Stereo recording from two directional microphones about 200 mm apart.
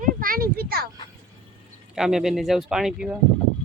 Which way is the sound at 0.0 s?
45° right (ahead or behind).